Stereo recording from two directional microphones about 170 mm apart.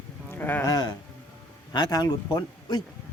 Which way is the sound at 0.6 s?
25° left (ahead or behind).